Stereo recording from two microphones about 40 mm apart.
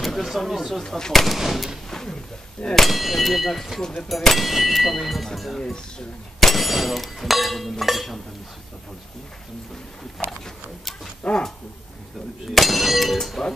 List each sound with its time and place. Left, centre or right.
0.0 s speech: centre
1.2 s speech: centre
1.9 s speech: centre
2.9 s speech: centre
10.2 s speech: centre
11.2 s speech: left
12.4 s speech: centre